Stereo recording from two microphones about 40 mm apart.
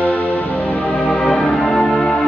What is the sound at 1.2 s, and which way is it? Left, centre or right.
Music, centre.